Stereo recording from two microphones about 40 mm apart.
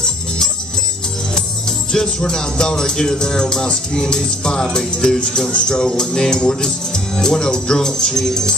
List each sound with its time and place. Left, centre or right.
1.9 s music: centre